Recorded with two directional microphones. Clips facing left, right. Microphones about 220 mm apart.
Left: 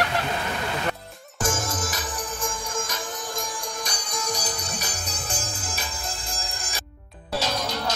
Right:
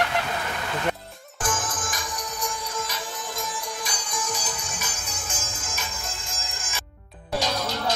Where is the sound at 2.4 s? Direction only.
45° left (ahead or behind).